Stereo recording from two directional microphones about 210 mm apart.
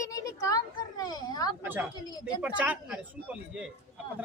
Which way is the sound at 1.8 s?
5° right (ahead or behind).